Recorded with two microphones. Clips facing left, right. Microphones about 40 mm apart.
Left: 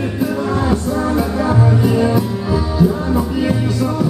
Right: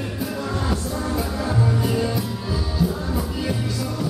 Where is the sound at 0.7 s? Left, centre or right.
Centre.